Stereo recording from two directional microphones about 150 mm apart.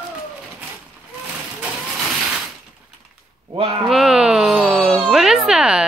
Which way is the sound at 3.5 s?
40° right (ahead or behind).